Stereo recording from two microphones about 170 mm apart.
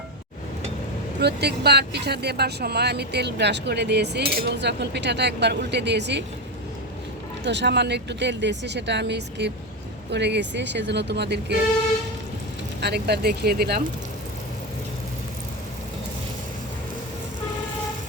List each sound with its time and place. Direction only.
1.2 s speech: 75° right (ahead or behind); by 6.2 s 90° right
7.4 s speech: 90° right
12.8 s speech: 70° right (ahead or behind)